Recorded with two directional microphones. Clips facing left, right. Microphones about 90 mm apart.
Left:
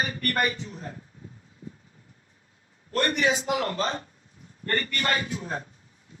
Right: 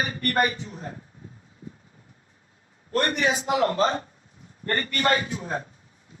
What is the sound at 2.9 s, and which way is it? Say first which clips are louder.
A man's voice: right 1 dB; 30° right (ahead or behind).